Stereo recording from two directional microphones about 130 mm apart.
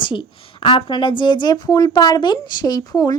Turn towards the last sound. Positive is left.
turn(degrees=30)  # may be behind; listen again after turning